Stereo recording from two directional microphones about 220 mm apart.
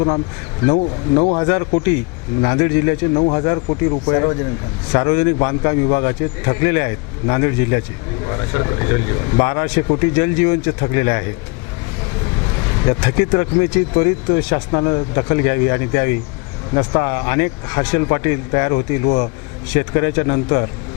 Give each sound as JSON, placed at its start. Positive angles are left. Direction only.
{"t": 0.7, "sound": "a man's voice", "side_deg": 25}
{"t": 12.8, "sound": "a man's voice", "side_deg": 20}
{"t": 19.0, "sound": "a man's voice", "side_deg": 30}
{"t": 19.7, "sound": "speech", "side_deg": 15}